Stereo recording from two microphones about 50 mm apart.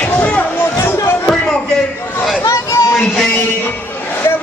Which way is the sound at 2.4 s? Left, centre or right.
Left.